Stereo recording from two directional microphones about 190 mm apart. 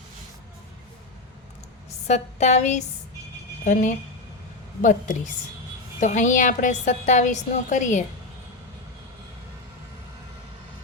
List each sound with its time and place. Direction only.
2.0 s a woman's voice: 35° left (ahead or behind)